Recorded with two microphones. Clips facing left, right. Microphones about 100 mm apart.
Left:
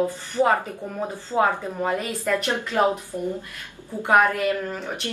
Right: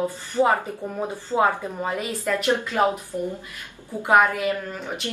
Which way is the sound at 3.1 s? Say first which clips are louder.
Right 1 dB; 20° left (ahead or behind).